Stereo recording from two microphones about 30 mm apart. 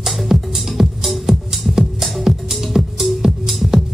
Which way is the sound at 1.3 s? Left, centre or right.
Centre.